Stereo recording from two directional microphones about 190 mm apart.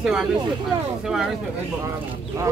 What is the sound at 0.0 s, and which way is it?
Speech, 5° right (ahead or behind).